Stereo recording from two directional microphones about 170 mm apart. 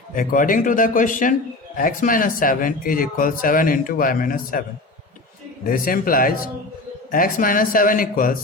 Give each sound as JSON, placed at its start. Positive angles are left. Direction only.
{"t": 0.1, "sound": "a man's voice", "side_deg": 55}
{"t": 5.6, "sound": "a man's voice", "side_deg": 55}